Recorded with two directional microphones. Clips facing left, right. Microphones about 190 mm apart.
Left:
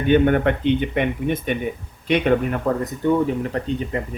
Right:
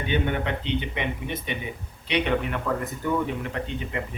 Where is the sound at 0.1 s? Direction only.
50° left (ahead or behind).